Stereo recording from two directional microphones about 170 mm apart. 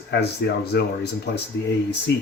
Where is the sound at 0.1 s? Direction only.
70° left (ahead or behind).